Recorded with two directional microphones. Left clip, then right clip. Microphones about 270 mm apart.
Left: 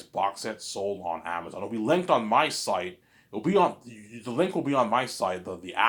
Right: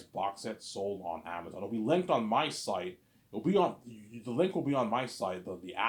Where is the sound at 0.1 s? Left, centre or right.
Centre.